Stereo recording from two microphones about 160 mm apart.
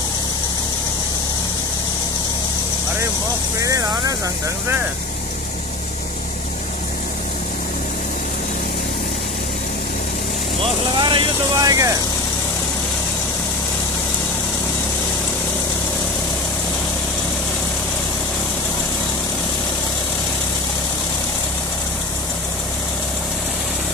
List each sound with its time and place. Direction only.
3.5 s speech: 20° right (ahead or behind)
11.0 s speech: 30° right (ahead or behind)